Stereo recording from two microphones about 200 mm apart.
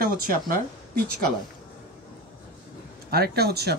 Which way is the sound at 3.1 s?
50° right (ahead or behind).